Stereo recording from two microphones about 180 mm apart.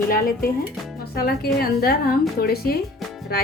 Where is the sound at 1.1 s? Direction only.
60° left (ahead or behind).